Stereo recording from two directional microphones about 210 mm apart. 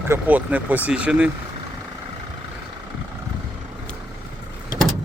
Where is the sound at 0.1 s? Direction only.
5° right (ahead or behind).